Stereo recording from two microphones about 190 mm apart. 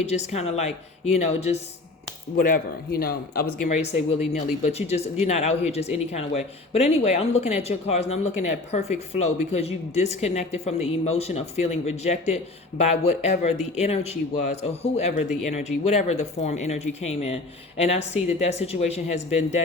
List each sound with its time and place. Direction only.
0.0 s a woman's voice: 35° left (ahead or behind)
2.4 s a woman's voice: 50° left (ahead or behind); by 19.5 s 35° left (ahead or behind)